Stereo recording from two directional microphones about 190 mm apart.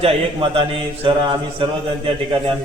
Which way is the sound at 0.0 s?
30° right (ahead or behind).